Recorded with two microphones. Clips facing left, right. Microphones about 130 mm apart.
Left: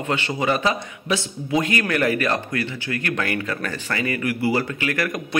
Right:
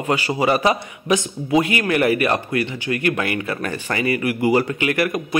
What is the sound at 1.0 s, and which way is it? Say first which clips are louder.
A man's voice: right 5 dB; 15° right (ahead or behind).